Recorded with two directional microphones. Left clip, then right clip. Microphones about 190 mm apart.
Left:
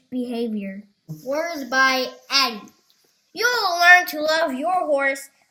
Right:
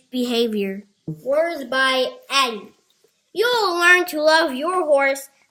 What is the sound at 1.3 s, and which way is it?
A woman's voice, 20° right (ahead or behind).